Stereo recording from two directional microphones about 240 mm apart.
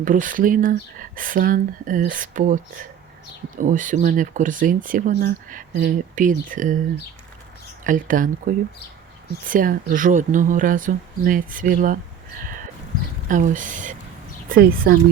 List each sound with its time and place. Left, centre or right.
0.0 s speech: right
7.9 s speech: right
13.2 s speech: right